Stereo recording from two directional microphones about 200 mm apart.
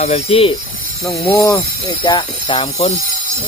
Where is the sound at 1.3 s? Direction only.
10° left (ahead or behind).